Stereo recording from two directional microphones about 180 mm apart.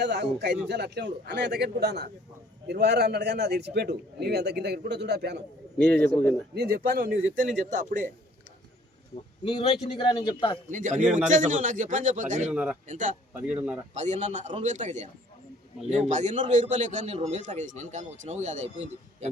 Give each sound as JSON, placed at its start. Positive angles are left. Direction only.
{"t": 0.0, "sound": "a man's voice", "side_deg": -75}
{"t": 6.5, "sound": "speech", "side_deg": -60}
{"t": 7.2, "sound": "a man's voice", "side_deg": -90}
{"t": 7.7, "sound": "a man's voice", "side_deg": -45}
{"t": 9.4, "sound": "a man's voice", "side_deg": 30}
{"t": 10.7, "sound": "a man's voice", "side_deg": -45}
{"t": 12.5, "sound": "speech", "side_deg": -5}
{"t": 12.9, "sound": "a man's voice", "side_deg": -45}
{"t": 13.3, "sound": "speech", "side_deg": -5}
{"t": 13.9, "sound": "a man's voice", "side_deg": -40}